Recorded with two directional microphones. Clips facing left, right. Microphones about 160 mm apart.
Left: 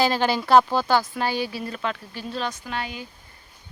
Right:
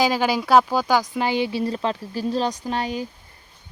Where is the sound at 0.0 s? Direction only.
10° right (ahead or behind); by 3.1 s 35° right (ahead or behind).